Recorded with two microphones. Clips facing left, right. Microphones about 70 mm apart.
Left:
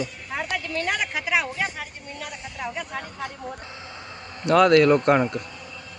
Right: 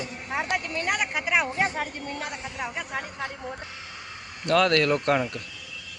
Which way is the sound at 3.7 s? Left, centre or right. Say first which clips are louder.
Left 2 dB; left.